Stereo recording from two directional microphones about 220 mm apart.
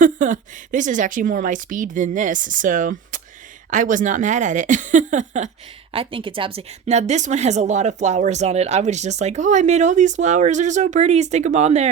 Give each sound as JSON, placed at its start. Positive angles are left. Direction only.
{"t": 0.0, "sound": "a woman's voice", "side_deg": -35}